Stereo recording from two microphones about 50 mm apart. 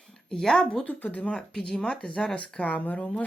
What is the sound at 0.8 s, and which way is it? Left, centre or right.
Speech, left.